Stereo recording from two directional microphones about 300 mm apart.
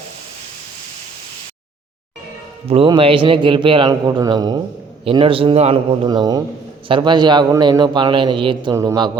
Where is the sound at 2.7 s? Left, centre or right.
Centre.